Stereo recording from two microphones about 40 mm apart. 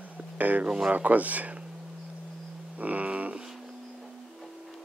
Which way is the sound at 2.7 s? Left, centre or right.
Right.